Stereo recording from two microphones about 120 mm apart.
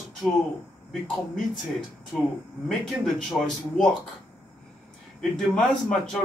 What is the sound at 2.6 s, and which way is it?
Speech, centre (ahead or behind).